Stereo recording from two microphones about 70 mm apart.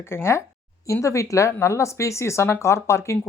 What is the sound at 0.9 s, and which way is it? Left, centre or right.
Speech, left.